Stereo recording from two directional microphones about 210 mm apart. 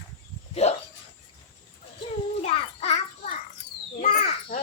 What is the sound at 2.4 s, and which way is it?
Child singing, 30° left (ahead or behind).